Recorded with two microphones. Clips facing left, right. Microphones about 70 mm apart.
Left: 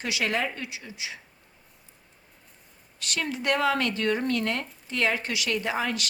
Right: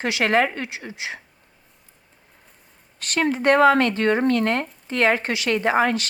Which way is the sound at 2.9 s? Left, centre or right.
Right.